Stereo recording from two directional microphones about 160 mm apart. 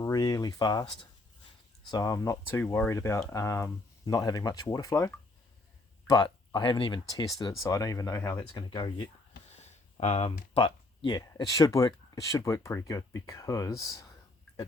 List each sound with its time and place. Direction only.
0.0 s speech: 25° left (ahead or behind)
8.5 s speech: 30° left (ahead or behind)
9.5 s speech: 45° left (ahead or behind); by 14.1 s 20° left (ahead or behind)